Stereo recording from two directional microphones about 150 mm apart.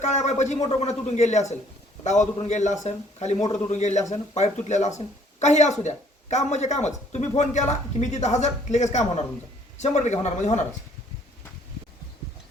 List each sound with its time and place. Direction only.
0.0 s speech: 50° left (ahead or behind)